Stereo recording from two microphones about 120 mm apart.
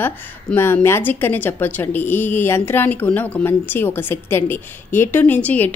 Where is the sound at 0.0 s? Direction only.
20° left (ahead or behind).